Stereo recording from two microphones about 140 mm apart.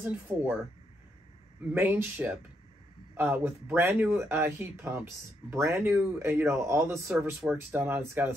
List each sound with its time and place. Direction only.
0.0 s speech: 10° right (ahead or behind)
1.7 s speech: 15° right (ahead or behind)